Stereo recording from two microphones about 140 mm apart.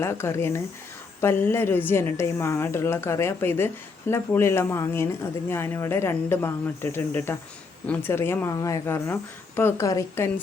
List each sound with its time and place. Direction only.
0.0 s a woman's voice: 20° left (ahead or behind)